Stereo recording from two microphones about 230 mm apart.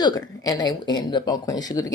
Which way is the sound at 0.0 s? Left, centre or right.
Centre.